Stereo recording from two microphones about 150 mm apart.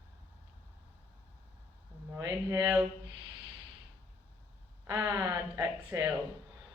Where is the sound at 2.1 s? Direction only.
20° right (ahead or behind).